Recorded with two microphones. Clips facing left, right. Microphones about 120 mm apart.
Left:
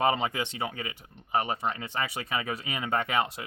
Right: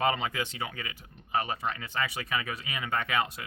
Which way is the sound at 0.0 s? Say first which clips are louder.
Left 2 dB; 25° left (ahead or behind).